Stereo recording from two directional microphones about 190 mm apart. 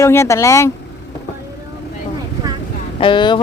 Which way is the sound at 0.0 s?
15° left (ahead or behind).